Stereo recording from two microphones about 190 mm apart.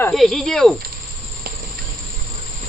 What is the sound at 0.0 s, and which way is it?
Speech, centre (ahead or behind).